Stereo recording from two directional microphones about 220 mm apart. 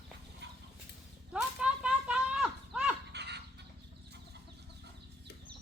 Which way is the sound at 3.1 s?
50° right (ahead or behind).